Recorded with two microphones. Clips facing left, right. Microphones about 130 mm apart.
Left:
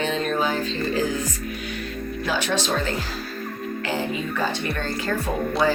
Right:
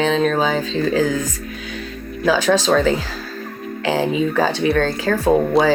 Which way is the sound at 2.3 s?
90° right.